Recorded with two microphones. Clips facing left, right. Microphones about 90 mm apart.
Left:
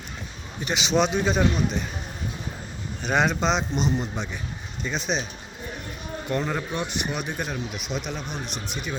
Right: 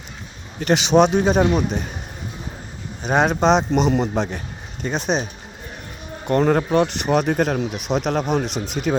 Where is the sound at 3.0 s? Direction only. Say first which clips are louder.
Right 5 dB; 45° right (ahead or behind).